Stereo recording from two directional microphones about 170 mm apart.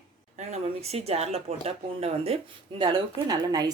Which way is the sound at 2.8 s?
25° right (ahead or behind).